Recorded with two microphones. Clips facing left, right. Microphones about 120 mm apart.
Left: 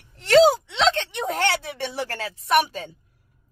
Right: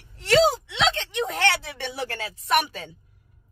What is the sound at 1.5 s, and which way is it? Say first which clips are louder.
Speech: left 3 dB; 40° left (ahead or behind).